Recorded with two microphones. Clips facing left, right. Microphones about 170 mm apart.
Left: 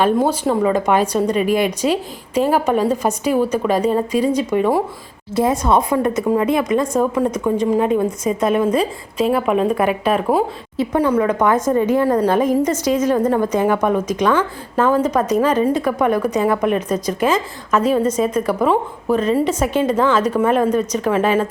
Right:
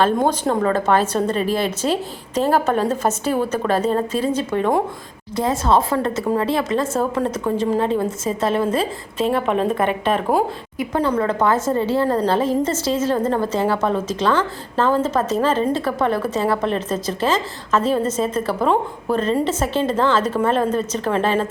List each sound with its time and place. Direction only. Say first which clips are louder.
0.0 s a woman's voice: left 2 dB; 5° left (ahead or behind)
5.3 s a woman's voice: left 2 dB; 20° left (ahead or behind)
7.3 s a woman's voice: left 3 dB; 5° right (ahead or behind)
7.7 s a woman's voice: left 3 dB; 10° left (ahead or behind)